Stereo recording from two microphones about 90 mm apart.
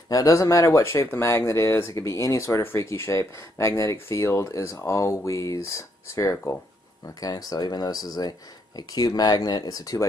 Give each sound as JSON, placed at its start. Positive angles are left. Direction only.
{"t": 0.1, "sound": "speech", "side_deg": 35}
{"t": 6.3, "sound": "speech", "side_deg": 20}
{"t": 7.2, "sound": "speech", "side_deg": 45}